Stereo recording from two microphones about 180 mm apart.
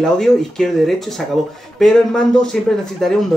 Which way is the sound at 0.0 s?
5° left (ahead or behind).